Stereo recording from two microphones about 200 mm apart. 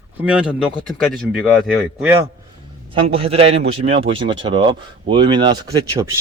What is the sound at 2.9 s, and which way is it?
Speech, 30° right (ahead or behind).